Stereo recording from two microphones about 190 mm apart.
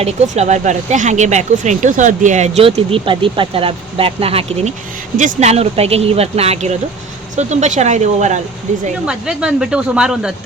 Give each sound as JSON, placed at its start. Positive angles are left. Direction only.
{"t": 0.0, "sound": "speech", "side_deg": -35}
{"t": 9.0, "sound": "speech", "side_deg": -5}